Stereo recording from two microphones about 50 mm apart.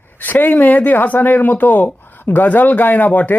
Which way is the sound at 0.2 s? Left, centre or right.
Left.